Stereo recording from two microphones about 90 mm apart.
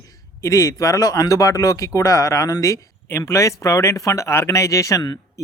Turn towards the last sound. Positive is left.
turn(degrees=35)  # may be behind; listen again after turning